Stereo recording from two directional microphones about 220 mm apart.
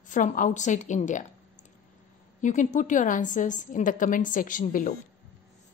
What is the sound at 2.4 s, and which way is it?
A woman's voice, 35° left (ahead or behind).